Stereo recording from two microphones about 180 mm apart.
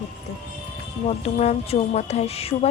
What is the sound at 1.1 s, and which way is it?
Speech, 35° left (ahead or behind).